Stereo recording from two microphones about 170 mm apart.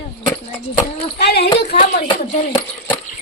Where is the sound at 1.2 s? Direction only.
80° left.